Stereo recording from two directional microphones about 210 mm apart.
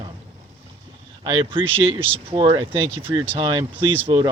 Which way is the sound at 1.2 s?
25° right (ahead or behind).